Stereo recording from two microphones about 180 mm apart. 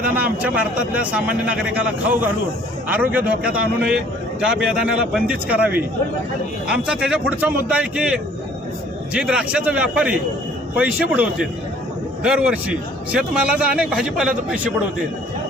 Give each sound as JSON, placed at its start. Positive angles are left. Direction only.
{"t": 0.4, "sound": "a man's voice", "side_deg": -5}